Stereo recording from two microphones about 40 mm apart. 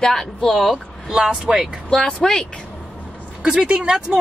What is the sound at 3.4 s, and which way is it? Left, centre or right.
Speech, right.